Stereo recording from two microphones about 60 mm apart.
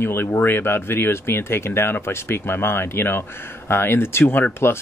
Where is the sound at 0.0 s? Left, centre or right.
Left.